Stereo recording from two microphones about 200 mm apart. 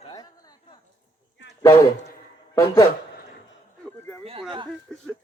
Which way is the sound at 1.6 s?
15° left (ahead or behind).